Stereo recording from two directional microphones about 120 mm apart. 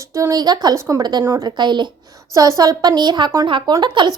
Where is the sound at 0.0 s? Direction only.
25° right (ahead or behind).